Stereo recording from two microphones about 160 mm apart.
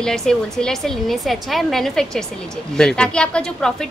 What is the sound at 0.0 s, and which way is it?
A woman's voice, 5° left (ahead or behind).